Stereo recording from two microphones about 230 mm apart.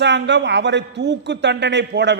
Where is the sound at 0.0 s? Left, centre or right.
Right.